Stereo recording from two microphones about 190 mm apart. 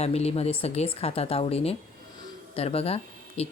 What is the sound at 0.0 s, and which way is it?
A woman's voice, 35° left (ahead or behind).